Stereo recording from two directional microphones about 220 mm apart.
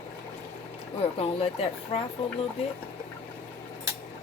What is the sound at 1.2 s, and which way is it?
Speech, 25° left (ahead or behind).